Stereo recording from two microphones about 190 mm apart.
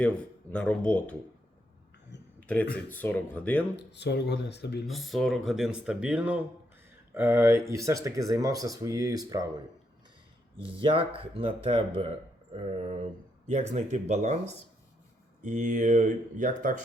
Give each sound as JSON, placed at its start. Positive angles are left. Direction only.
{"t": 0.0, "sound": "speech", "side_deg": 5}
{"t": 2.7, "sound": "speech", "side_deg": 10}
{"t": 3.8, "sound": "speech", "side_deg": 65}
{"t": 4.9, "sound": "speech", "side_deg": 0}
{"t": 10.6, "sound": "speech", "side_deg": -25}